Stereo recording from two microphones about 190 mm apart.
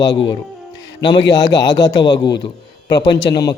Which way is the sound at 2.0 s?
25° left (ahead or behind).